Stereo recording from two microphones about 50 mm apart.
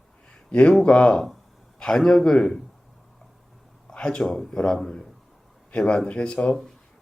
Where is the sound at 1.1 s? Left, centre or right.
Centre.